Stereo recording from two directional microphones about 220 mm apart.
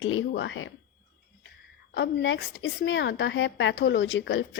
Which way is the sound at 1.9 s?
55° left (ahead or behind).